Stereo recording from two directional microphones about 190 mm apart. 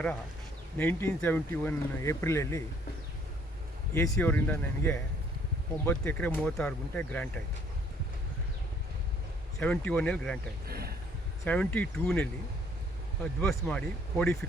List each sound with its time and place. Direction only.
0.8 s speech: 10° left (ahead or behind)
3.9 s speech: 15° left (ahead or behind)
9.6 s speech: 10° left (ahead or behind)
10.7 s vehicle: 55° right (ahead or behind)
11.4 s speech: 5° left (ahead or behind)
13.4 s speech: 5° left (ahead or behind)